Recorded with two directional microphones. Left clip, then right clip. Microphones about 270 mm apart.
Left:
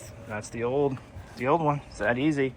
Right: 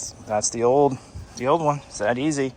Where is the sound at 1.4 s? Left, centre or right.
Centre.